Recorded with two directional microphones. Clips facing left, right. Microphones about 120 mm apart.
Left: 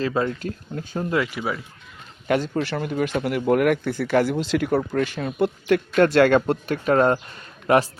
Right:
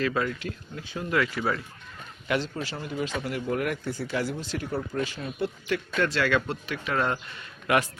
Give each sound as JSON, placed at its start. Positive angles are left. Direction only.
{"t": 0.0, "sound": "speech", "side_deg": 30}
{"t": 0.3, "sound": "speech", "side_deg": 40}
{"t": 1.1, "sound": "speech", "side_deg": 20}
{"t": 2.2, "sound": "speech", "side_deg": 50}